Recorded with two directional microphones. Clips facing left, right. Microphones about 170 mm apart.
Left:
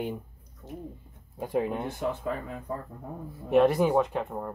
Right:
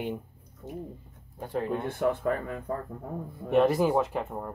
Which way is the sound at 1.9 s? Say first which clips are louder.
Right 4 dB; 60° right (ahead or behind).